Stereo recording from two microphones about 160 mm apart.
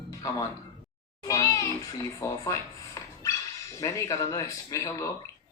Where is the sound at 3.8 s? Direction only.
20° left (ahead or behind).